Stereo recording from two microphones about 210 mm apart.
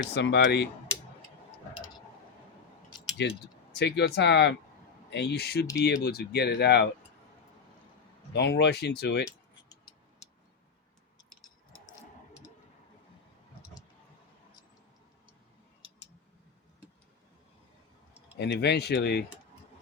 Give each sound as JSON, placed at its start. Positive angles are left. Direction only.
{"t": 0.0, "sound": "speech", "side_deg": 55}
{"t": 3.2, "sound": "speech", "side_deg": 50}
{"t": 8.3, "sound": "speech", "side_deg": 55}
{"t": 18.3, "sound": "speech", "side_deg": 55}